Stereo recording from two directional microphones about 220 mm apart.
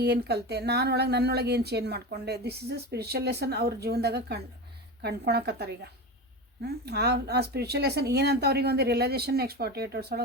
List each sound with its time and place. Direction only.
0.0 s speech: 45° right (ahead or behind)